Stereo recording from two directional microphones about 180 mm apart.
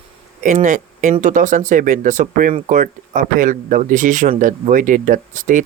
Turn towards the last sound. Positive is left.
turn(degrees=-45)  # may be behind; listen again after turning